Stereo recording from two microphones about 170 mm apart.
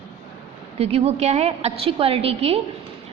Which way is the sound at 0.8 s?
40° right (ahead or behind).